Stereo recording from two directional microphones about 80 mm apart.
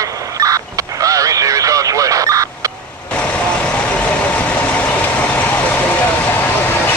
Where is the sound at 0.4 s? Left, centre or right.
Right.